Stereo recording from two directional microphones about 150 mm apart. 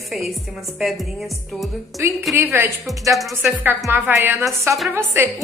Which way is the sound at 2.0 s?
20° right (ahead or behind).